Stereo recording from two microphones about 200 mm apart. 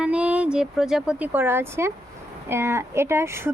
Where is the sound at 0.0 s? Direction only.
5° right (ahead or behind).